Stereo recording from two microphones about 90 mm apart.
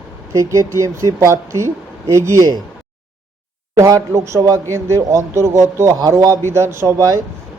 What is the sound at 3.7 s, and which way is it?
A man's voice, 40° right (ahead or behind).